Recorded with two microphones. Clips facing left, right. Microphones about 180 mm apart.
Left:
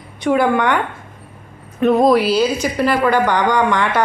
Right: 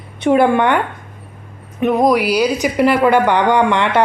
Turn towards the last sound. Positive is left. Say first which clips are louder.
# right 2 dB
turn(degrees=-25)  # may be behind; listen again after turning